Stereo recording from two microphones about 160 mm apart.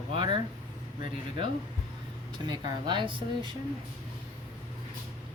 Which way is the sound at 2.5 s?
30° right (ahead or behind).